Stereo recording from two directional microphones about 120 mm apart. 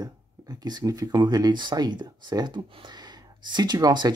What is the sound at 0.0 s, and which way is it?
Speech, 35° right (ahead or behind).